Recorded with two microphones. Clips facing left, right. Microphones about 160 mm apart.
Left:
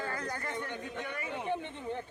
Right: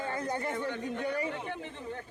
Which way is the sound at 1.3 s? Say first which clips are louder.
Left 2 dB; 20° left (ahead or behind).